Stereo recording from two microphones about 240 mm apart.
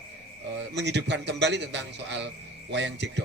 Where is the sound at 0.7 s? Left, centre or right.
Right.